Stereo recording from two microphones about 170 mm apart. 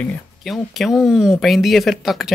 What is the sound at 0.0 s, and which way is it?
Speech, centre (ahead or behind).